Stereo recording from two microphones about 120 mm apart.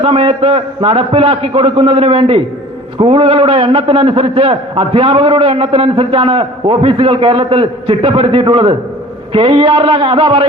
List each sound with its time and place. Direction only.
0.0 s a man's voice: 50° right (ahead or behind)